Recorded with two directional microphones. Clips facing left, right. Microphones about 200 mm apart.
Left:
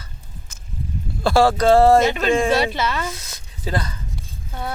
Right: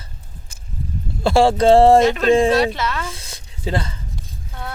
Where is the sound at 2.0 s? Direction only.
Centre (ahead or behind).